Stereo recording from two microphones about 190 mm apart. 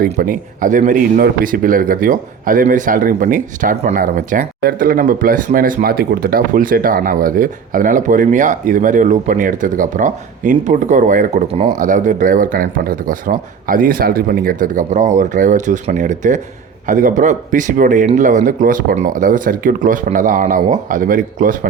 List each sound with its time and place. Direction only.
0.0 s a man's voice: 50° right (ahead or behind)